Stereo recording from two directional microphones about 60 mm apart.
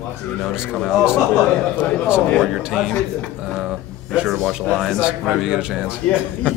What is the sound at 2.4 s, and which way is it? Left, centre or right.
A man's voice, centre.